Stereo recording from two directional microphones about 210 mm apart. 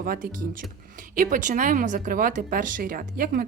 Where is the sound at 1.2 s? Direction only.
40° right (ahead or behind).